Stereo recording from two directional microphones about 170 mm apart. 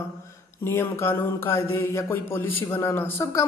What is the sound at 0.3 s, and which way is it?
Mantra, 15° left (ahead or behind).